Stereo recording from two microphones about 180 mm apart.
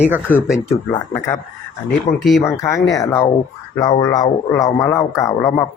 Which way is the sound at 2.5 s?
20° left (ahead or behind).